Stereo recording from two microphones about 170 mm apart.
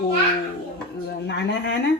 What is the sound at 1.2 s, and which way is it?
Speech, 85° left.